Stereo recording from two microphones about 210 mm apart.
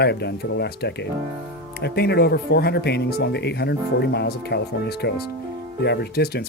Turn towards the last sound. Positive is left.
turn(degrees=50)  # may be behind; listen again after turning